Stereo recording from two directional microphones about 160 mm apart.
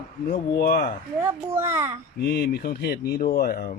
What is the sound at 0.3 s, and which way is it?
Speech, 70° left (ahead or behind).